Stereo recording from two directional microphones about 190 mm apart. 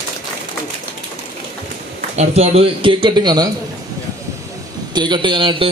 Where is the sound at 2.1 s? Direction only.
35° right (ahead or behind).